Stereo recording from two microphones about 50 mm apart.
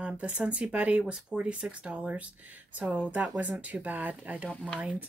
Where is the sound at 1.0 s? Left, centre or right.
Centre.